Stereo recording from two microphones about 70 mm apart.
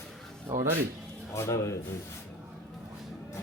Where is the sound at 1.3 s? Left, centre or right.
Left.